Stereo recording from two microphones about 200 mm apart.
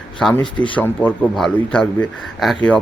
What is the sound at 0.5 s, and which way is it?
Speech, 25° left (ahead or behind).